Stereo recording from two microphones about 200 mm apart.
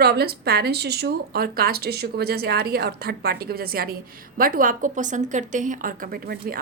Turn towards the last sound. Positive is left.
turn(degrees=-50)  # may be behind; listen again after turning